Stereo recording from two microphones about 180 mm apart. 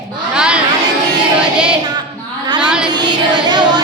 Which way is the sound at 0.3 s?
5° right (ahead or behind).